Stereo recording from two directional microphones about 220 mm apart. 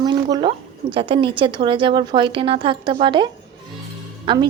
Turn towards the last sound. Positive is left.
turn(degrees=-20)  # may be behind; listen again after turning